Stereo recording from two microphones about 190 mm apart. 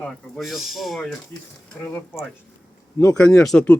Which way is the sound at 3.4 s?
5° left (ahead or behind).